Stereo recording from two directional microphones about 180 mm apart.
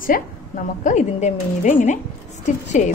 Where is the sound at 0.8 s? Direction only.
40° left (ahead or behind).